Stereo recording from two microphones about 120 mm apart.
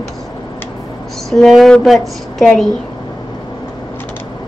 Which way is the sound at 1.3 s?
Centre (ahead or behind).